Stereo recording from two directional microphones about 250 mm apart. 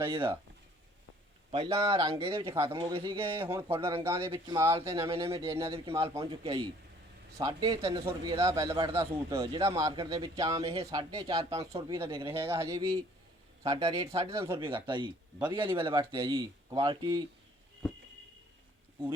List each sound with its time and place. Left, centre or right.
0.0 s speech: centre
1.5 s a man's voice: centre
3.4 s speech: centre
3.7 s a man's voice: right
4.0 s speech: centre
4.9 s a man's voice: right
5.5 s a man's voice: centre
10.6 s a man's voice: right